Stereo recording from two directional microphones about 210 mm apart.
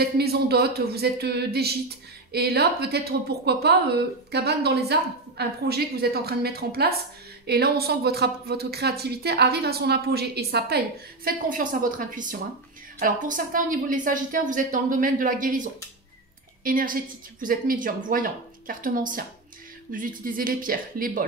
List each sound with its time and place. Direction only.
0.0 s a woman's voice: 50° right (ahead or behind)